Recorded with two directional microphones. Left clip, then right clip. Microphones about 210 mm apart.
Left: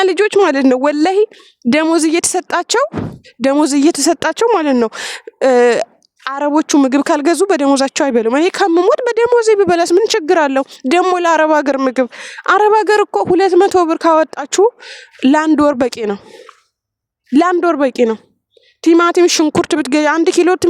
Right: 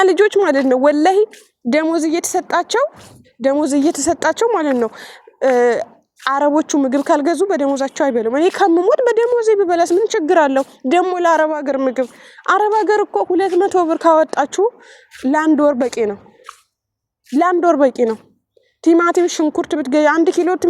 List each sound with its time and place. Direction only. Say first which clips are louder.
0.0 s a woman's voice: left 1 dB; 20° left (ahead or behind)
15.7 s speech: left 1 dB; 45° left (ahead or behind)
17.3 s speech: left 3 dB; 35° left (ahead or behind)
17.6 s a woman's voice: even; 20° left (ahead or behind); by 20.7 s 40° left (ahead or behind)